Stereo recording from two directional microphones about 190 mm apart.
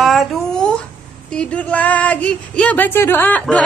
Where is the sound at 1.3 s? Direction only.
5° left (ahead or behind).